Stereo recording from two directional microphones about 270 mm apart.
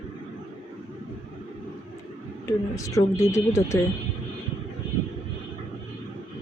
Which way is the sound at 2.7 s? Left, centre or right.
Centre.